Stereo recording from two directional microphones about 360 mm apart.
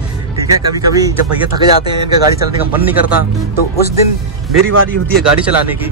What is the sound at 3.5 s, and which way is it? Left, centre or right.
Speech, left.